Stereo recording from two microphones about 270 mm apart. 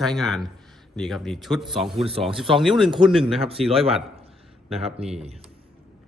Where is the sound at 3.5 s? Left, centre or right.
Right.